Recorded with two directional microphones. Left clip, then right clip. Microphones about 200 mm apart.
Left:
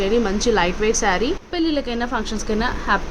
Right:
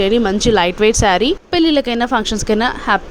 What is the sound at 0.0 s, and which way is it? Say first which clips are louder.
A woman's voice: right 5 dB; 40° right (ahead or behind).